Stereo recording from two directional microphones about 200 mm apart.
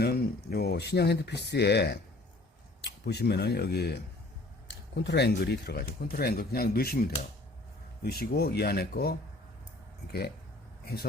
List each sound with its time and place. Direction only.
0.0 s speech: 50° left (ahead or behind)